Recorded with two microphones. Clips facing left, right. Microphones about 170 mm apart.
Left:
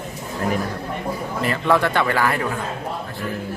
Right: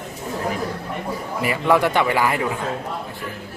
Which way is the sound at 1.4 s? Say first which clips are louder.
Right 1 dB; 10° right (ahead or behind).